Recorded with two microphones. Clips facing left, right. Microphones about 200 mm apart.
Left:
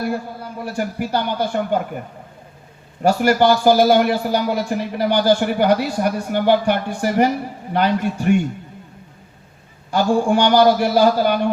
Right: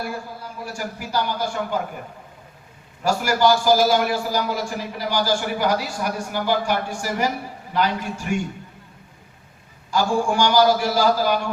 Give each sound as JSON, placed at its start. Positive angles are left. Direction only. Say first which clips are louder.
{"t": 0.6, "sound": "a man's voice", "louder": "left 8 dB", "side_deg": 60}
{"t": 3.0, "sound": "a man's voice", "louder": "left 4 dB", "side_deg": 60}
{"t": 9.9, "sound": "a man's voice", "louder": "left 4 dB", "side_deg": 60}